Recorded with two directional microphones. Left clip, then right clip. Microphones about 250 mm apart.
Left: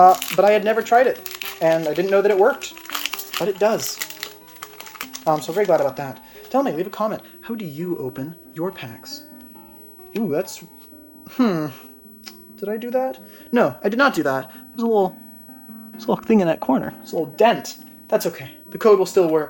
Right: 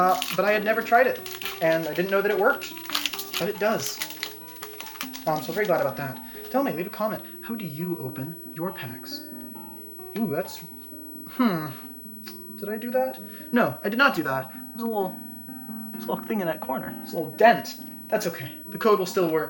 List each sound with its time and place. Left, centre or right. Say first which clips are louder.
0.0 s speech: left 9 dB; left
2.6 s music: left 1 dB; centre
3.4 s speech: left 6 dB; left
4.2 s music: left 2 dB; centre
5.2 s speech: left 6 dB; left
14.8 s speech: left 9 dB; left
17.1 s speech: left 2 dB; left